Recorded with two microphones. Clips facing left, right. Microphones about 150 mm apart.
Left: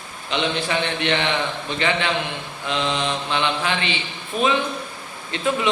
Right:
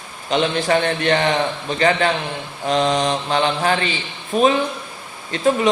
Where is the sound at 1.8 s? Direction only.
40° right (ahead or behind).